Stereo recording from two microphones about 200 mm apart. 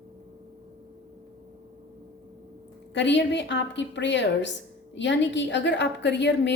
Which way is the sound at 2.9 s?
60° left (ahead or behind).